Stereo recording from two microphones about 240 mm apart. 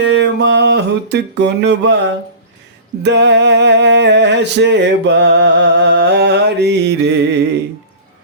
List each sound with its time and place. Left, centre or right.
0.2 s music: right